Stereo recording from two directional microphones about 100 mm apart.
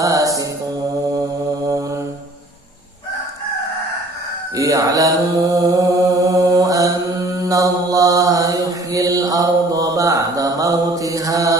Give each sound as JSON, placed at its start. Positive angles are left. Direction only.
{"t": 0.0, "sound": "mantra", "side_deg": -35}
{"t": 4.6, "sound": "mantra", "side_deg": -35}